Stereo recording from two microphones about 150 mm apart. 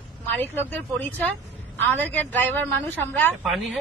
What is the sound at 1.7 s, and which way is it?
A woman's voice, 15° left (ahead or behind).